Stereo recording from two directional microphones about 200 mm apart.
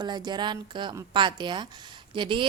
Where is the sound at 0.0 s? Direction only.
20° right (ahead or behind).